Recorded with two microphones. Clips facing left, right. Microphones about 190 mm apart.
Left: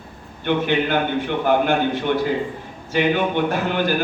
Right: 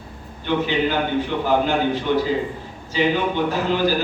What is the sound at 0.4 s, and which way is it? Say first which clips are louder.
Speech: left 1 dB; 60° left (ahead or behind).